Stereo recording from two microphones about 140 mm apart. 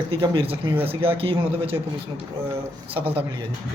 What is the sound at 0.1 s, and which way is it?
Speech, 40° right (ahead or behind).